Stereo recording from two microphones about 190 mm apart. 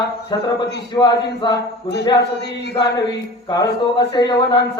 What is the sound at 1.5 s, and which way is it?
Speech, 65° left (ahead or behind).